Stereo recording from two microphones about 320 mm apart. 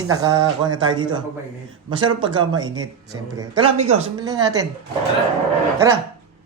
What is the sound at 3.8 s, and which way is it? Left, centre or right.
Speech, centre.